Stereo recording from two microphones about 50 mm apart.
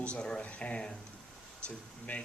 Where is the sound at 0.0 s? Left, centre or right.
Centre.